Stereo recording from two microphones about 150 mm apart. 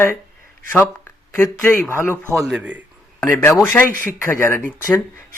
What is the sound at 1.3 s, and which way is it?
Speech, 15° left (ahead or behind).